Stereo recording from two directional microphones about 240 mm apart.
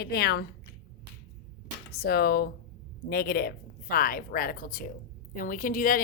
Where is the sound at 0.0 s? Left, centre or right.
Left.